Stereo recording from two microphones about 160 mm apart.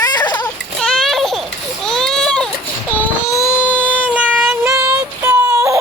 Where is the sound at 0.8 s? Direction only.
Centre (ahead or behind).